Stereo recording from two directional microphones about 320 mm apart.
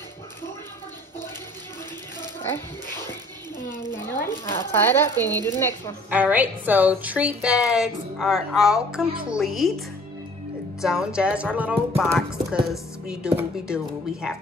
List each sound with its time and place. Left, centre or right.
3.9 s a sound: left
4.3 s speech: centre
6.0 s a woman's voice: centre